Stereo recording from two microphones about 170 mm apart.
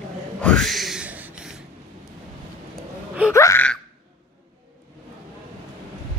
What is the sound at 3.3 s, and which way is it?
Laughter, 15° left (ahead or behind).